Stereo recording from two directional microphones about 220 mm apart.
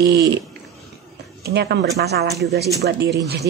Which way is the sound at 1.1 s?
45° right (ahead or behind).